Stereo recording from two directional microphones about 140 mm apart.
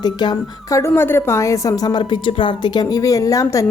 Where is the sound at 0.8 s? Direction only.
15° left (ahead or behind).